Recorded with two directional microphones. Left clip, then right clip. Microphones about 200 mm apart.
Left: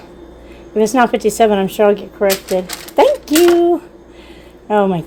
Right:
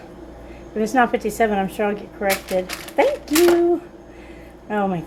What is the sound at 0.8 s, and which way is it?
Speech, 35° left (ahead or behind).